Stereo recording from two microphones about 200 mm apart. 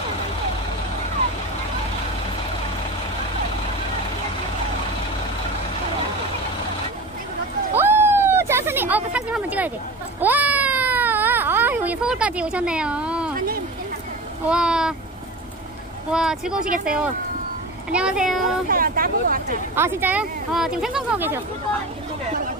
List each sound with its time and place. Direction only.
7.7 s a sound: 10° right (ahead or behind)
10.2 s baby cry: 10° right (ahead or behind)
14.5 s speech: 5° right (ahead or behind)
16.1 s speech: 5° right (ahead or behind)
18.7 s speech: 45° right (ahead or behind)
19.7 s speech: 10° right (ahead or behind)